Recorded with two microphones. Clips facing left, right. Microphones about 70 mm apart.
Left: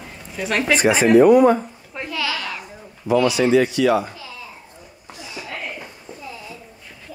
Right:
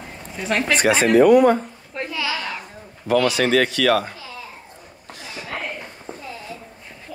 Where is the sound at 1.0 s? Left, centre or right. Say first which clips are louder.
Left 1 dB; right.